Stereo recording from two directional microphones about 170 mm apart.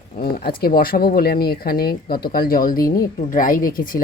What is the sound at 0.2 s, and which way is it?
Speech, 65° left (ahead or behind).